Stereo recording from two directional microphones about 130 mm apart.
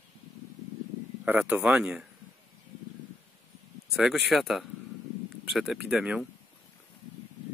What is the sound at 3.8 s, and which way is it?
Speech, centre (ahead or behind).